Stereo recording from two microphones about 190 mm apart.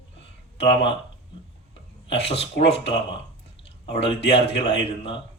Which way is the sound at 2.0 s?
30° left (ahead or behind).